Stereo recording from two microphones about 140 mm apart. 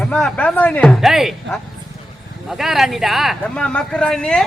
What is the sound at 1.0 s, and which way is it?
Speech, centre (ahead or behind).